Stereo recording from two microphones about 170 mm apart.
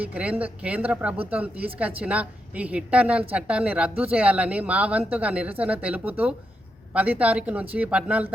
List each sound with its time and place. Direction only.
0.0 s speech: 10° right (ahead or behind)